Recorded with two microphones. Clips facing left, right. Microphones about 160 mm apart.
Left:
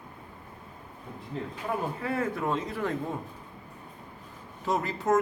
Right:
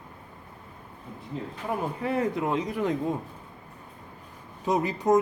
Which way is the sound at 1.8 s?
20° right (ahead or behind).